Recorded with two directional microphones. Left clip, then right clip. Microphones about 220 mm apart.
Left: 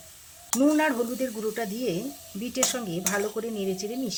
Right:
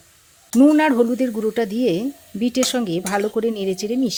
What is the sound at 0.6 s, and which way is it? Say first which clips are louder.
Speech: right 9 dB; 40° right (ahead or behind).